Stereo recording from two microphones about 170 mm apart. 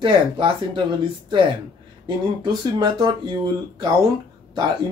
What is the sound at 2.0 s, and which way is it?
Speech, 25° right (ahead or behind).